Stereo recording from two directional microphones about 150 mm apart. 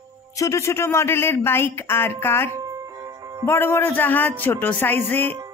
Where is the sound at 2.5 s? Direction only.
25° right (ahead or behind).